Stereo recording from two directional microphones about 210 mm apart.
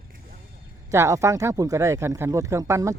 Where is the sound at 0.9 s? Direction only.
15° right (ahead or behind).